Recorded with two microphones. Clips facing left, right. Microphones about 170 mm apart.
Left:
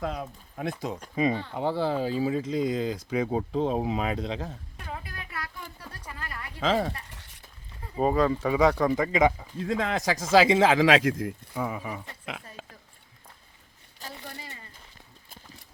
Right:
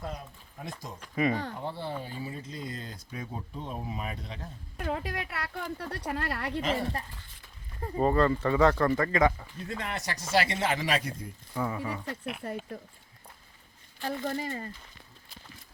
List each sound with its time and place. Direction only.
0.0 s speech: 90° left; by 0.9 s 65° left (ahead or behind)
1.1 s speech: 20° left (ahead or behind)
1.5 s speech: 90° left
4.9 s a woman's voice: 70° right (ahead or behind)
6.6 s speech: 90° left
7.1 s speech: 75° left (ahead or behind)
7.9 s speech: 10° left (ahead or behind)
9.6 s speech: 90° left
11.5 s speech: 10° left (ahead or behind)
12.4 s speech: 65° right (ahead or behind)
14.3 s speech: 45° right (ahead or behind)